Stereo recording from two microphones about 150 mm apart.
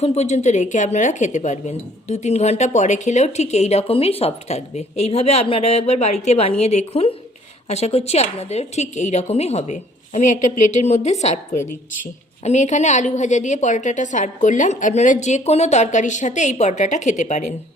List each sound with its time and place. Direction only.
0.0 s speech: 45° left (ahead or behind)